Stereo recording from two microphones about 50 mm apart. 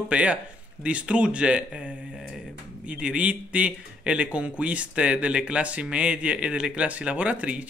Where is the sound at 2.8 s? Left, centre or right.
Right.